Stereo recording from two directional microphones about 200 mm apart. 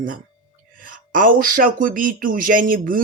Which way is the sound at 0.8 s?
45° right (ahead or behind).